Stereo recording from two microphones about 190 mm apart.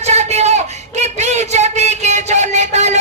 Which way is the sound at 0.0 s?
35° right (ahead or behind).